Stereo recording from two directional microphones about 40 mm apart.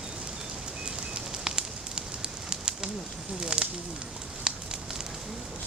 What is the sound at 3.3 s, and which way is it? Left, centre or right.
Speech, centre.